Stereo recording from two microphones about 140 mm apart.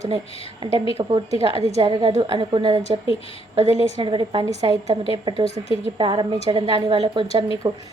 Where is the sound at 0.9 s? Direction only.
45° right (ahead or behind).